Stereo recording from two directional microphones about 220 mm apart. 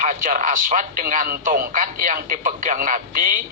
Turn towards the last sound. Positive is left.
turn(degrees=-40)  # may be behind; listen again after turning